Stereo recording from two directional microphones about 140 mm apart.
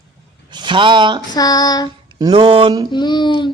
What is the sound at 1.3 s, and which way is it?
Child singing, 30° left (ahead or behind).